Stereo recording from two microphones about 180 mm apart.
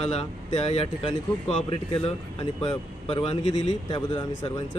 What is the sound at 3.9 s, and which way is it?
Speech, 25° left (ahead or behind).